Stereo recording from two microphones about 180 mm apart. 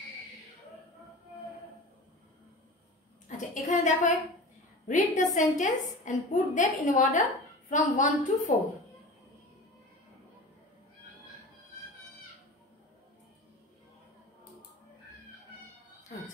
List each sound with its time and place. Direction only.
3.3 s a woman's voice: 45° left (ahead or behind)